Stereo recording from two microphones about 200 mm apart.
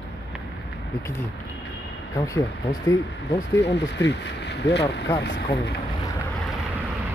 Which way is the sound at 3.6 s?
55° left (ahead or behind).